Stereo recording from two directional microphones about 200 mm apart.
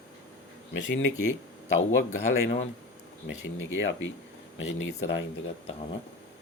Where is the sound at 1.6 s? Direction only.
35° left (ahead or behind).